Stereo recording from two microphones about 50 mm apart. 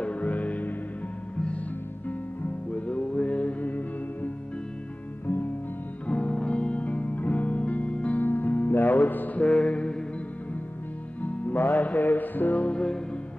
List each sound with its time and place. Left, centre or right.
0.0 s music: left
2.0 s music: left
5.2 s music: left
6.0 s music: left
8.2 s music: left
9.4 s mantra: left
11.2 s music: left